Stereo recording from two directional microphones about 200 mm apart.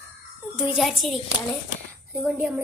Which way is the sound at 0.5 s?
5° right (ahead or behind).